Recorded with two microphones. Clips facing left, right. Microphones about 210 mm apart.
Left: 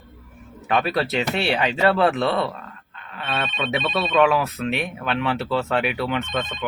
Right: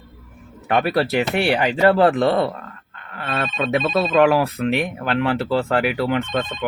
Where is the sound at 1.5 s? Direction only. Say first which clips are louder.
Right 4 dB; 30° right (ahead or behind).